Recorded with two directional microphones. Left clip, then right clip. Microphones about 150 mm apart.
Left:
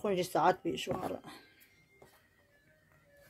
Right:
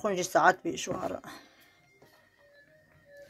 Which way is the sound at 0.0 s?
10° left (ahead or behind).